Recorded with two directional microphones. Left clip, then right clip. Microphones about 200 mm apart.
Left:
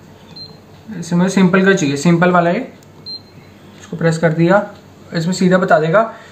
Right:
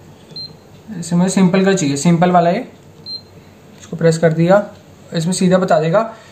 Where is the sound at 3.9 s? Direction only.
30° right (ahead or behind).